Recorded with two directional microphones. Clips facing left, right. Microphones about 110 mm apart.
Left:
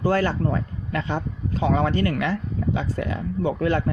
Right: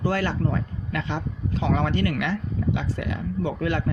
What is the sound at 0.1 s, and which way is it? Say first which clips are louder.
Speech: left 3 dB; 40° left (ahead or behind).